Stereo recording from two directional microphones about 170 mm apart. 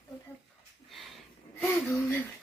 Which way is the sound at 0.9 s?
Centre (ahead or behind).